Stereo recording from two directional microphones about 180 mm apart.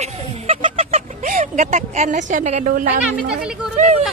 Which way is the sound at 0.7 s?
40° right (ahead or behind).